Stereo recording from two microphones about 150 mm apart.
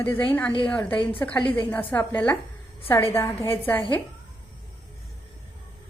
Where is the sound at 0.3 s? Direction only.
10° left (ahead or behind).